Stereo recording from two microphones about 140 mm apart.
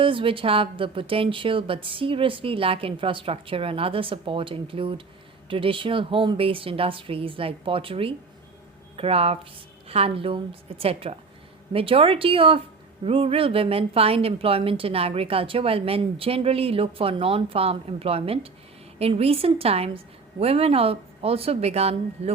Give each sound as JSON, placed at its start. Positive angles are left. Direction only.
{"t": 0.0, "sound": "a woman's voice", "side_deg": -40}